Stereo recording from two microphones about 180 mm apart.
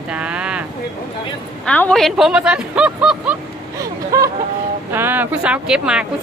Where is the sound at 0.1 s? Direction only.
5° right (ahead or behind).